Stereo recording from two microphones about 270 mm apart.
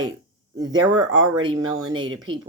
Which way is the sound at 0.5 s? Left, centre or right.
Centre.